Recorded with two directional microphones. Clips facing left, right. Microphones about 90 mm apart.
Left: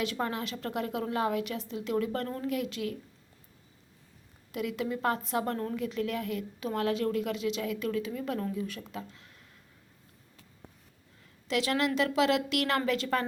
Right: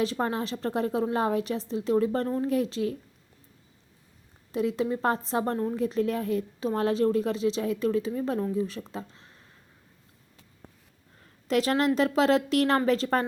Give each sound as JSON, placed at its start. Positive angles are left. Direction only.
{"t": 0.0, "sound": "a woman's voice", "side_deg": -35}
{"t": 4.5, "sound": "a woman's voice", "side_deg": -30}
{"t": 11.4, "sound": "a woman's voice", "side_deg": -40}